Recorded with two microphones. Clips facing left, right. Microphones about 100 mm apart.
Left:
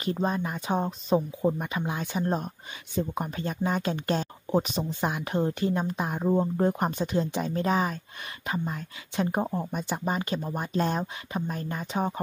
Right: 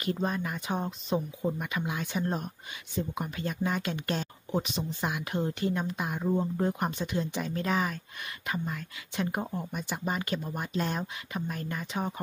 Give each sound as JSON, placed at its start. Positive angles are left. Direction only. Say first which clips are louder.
{"t": 0.0, "sound": "speech", "louder": "left 3 dB", "side_deg": 25}